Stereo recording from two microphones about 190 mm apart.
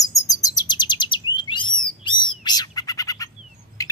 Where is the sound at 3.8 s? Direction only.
15° left (ahead or behind).